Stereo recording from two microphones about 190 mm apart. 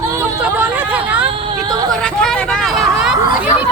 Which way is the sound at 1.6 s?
20° right (ahead or behind).